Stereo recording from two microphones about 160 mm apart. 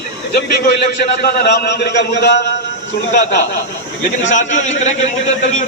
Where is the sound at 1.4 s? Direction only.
90° left.